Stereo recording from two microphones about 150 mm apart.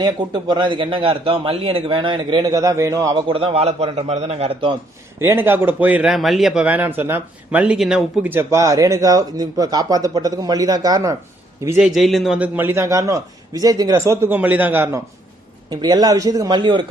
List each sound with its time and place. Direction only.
0.0 s a man's voice: 30° right (ahead or behind)
3.2 s a man's voice: 35° right (ahead or behind)
5.2 s speech: 15° right (ahead or behind)
11.8 s speech: centre (ahead or behind)
15.7 s speech: 30° right (ahead or behind)